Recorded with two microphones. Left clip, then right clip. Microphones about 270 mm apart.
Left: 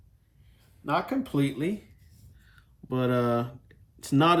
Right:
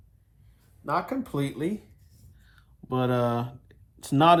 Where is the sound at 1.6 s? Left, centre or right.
Centre.